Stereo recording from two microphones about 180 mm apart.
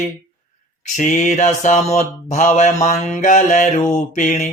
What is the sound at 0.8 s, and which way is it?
Mantra, 40° left (ahead or behind).